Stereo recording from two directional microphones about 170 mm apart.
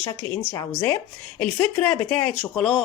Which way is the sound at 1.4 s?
5° left (ahead or behind).